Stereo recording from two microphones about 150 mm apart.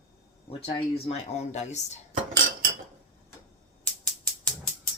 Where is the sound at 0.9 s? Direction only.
45° left (ahead or behind).